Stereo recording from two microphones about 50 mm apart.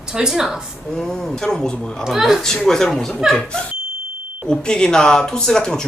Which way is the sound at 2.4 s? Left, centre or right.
Centre.